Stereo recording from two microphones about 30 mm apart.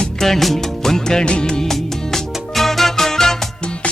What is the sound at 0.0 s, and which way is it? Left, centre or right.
Music, centre.